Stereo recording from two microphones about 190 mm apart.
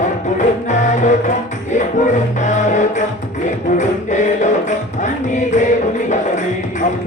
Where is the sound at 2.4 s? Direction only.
40° left (ahead or behind).